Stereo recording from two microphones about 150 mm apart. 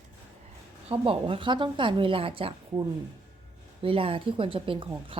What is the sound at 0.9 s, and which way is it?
Speech, 35° right (ahead or behind).